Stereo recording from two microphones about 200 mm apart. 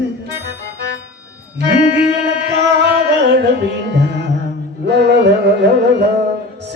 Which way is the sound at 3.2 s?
55° right (ahead or behind).